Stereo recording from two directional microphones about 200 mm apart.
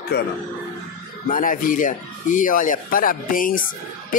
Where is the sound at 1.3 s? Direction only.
45° left (ahead or behind).